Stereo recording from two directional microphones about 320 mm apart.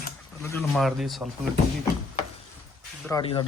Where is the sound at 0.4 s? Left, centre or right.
Centre.